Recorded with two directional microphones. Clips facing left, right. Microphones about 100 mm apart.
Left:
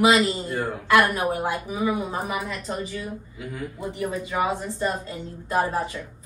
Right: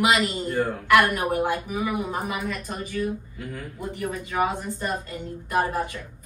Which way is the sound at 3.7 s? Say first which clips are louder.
Left 1 dB; 20° left (ahead or behind).